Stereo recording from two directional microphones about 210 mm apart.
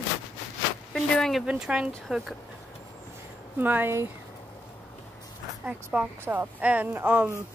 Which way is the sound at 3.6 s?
10° right (ahead or behind).